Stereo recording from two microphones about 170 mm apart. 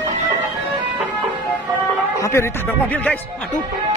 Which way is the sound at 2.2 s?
15° left (ahead or behind).